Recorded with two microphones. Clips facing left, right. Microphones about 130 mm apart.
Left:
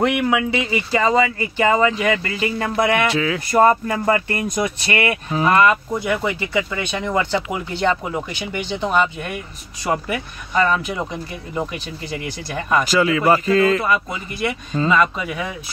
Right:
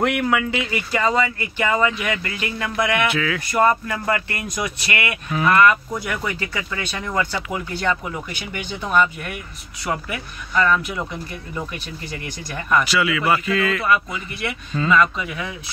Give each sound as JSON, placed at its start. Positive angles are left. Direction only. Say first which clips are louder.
{"t": 0.3, "sound": "speech", "louder": "left 2 dB", "side_deg": 20}
{"t": 12.8, "sound": "speech", "louder": "left 4 dB", "side_deg": 40}